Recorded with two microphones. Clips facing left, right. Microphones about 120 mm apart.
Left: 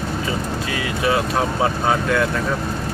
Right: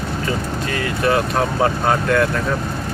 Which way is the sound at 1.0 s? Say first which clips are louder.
Right 2 dB; 5° left (ahead or behind).